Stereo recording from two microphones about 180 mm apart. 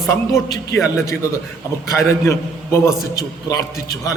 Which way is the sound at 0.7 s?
15° left (ahead or behind).